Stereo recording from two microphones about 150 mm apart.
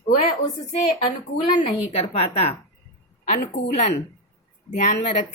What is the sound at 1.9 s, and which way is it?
Speech, 40° left (ahead or behind).